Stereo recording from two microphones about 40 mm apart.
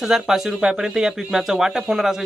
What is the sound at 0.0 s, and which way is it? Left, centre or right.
A man's voice, centre.